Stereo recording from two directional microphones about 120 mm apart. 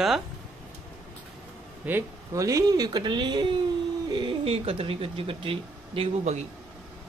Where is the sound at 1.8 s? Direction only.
20° right (ahead or behind); by 6.1 s 50° right (ahead or behind).